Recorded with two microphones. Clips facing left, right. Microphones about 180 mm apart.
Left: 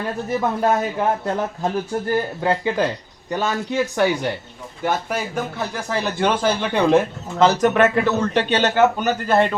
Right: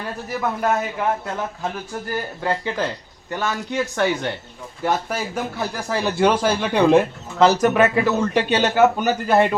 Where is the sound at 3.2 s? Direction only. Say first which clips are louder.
Left 3 dB; 20° left (ahead or behind).